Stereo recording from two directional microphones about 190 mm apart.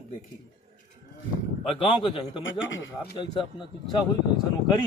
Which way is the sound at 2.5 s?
90° left.